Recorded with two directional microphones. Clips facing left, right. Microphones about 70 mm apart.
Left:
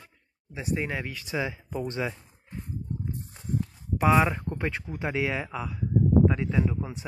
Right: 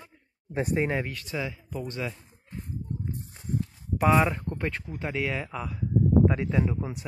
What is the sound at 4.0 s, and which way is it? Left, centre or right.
Speech, centre.